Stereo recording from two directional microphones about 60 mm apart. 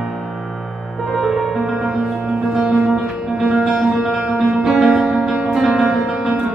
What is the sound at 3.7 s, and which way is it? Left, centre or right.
Music, centre.